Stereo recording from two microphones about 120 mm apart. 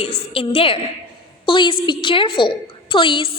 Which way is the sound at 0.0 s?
50° left (ahead or behind).